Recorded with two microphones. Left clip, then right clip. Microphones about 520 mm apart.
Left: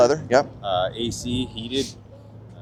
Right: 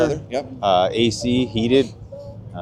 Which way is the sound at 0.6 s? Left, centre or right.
Right.